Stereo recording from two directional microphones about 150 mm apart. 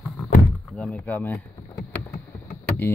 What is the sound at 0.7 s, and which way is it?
Speech, 5° left (ahead or behind).